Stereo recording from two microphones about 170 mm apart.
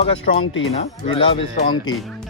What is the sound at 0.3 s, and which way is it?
Speech, 50° left (ahead or behind).